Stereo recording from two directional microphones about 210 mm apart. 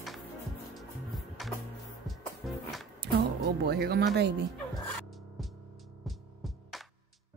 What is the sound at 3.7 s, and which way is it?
Speech, 50° right (ahead or behind).